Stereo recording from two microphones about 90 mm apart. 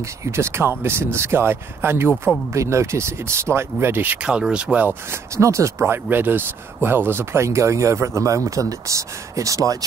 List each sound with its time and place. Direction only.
0.0 s speech: 30° right (ahead or behind); by 4.8 s 10° right (ahead or behind)
4.8 s speech: 30° right (ahead or behind)